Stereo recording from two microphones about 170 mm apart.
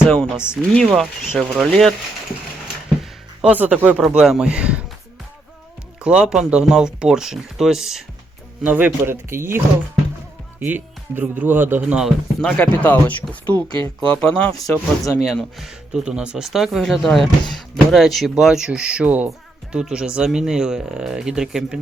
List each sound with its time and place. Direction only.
0.0 s speech: centre (ahead or behind)
3.0 s speech: 10° right (ahead or behind)
6.0 s speech: 5° right (ahead or behind)
10.7 s speech: 10° right (ahead or behind); by 13.7 s 10° left (ahead or behind)
13.7 s speech: 20° left (ahead or behind)
14.0 s speech: 5° left (ahead or behind)
14.5 s speech: 20° left (ahead or behind)
15.2 s speech: centre (ahead or behind)